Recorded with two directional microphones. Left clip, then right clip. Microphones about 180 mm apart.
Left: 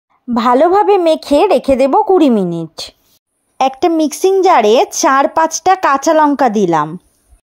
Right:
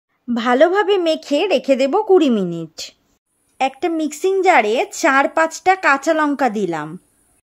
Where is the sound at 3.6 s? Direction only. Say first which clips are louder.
Left 7 dB; 30° left (ahead or behind).